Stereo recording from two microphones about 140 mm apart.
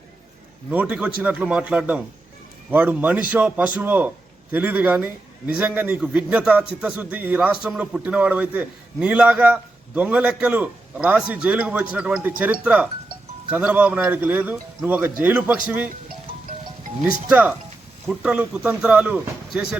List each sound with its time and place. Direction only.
0.7 s a man's voice: 10° right (ahead or behind)
17.2 s a man's voice: 10° right (ahead or behind)